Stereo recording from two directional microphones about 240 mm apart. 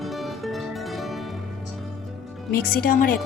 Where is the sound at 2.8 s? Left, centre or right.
Left.